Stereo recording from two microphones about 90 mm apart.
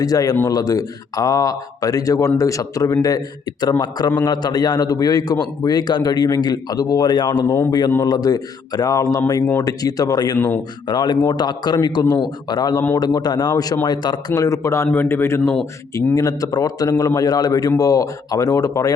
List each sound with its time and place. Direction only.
0.0 s a man's voice: 40° left (ahead or behind)
7.4 s a man's voice: 25° left (ahead or behind)
7.7 s a man's voice: 55° left (ahead or behind); by 15.5 s 30° left (ahead or behind)
16.1 s a man's voice: 40° left (ahead or behind)